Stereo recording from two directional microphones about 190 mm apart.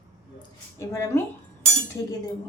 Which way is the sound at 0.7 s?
15° left (ahead or behind).